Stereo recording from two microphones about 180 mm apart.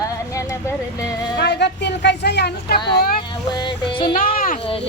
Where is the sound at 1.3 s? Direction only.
70° left (ahead or behind).